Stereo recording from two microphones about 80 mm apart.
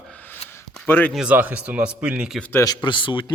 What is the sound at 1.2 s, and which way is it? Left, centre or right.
Speech, centre.